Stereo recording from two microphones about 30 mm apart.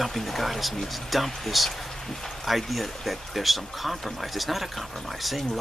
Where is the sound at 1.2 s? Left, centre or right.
Centre.